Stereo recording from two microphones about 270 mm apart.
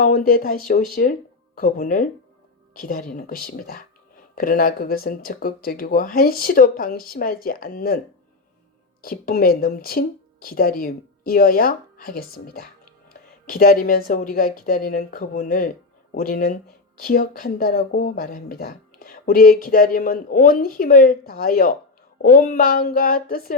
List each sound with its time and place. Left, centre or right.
0.0 s speech: left
9.0 s speech: left
13.5 s speech: left